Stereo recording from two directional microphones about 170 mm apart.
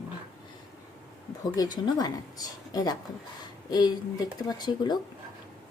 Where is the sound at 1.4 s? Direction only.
25° left (ahead or behind).